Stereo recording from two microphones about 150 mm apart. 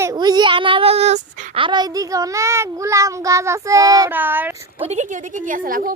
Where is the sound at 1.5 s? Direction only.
30° right (ahead or behind); by 4.6 s 15° right (ahead or behind).